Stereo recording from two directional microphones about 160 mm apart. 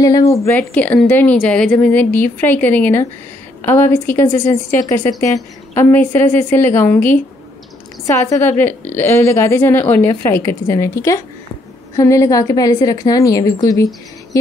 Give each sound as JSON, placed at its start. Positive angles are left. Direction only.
{"t": 0.0, "sound": "a woman's voice", "side_deg": 20}